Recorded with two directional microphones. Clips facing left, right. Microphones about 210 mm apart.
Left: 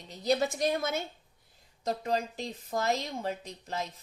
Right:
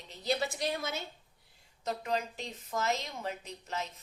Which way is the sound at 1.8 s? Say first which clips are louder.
Left 3 dB; 35° left (ahead or behind).